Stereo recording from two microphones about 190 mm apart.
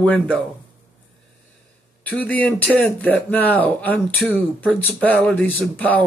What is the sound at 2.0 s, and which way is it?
Speech, 10° left (ahead or behind).